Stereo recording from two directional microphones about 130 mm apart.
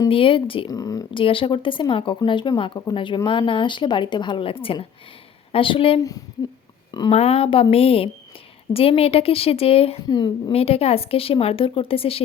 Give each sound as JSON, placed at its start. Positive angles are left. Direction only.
{"t": 0.1, "sound": "a woman's voice", "side_deg": 45}
{"t": 0.7, "sound": "speech", "side_deg": 30}
{"t": 1.1, "sound": "a woman's voice", "side_deg": 40}
{"t": 6.0, "sound": "speech", "side_deg": 25}
{"t": 7.1, "sound": "a woman's voice", "side_deg": 50}
{"t": 10.1, "sound": "speech", "side_deg": 35}
{"t": 10.5, "sound": "a woman's voice", "side_deg": 50}